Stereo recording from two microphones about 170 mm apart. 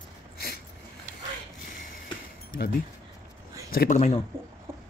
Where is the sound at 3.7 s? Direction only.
60° left (ahead or behind).